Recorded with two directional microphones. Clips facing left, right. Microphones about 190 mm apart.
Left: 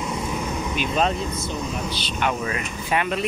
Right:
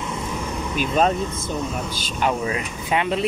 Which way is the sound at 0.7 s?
45° right (ahead or behind).